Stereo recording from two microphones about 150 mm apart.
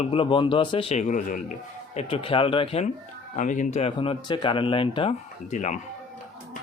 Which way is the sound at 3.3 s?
55° left (ahead or behind).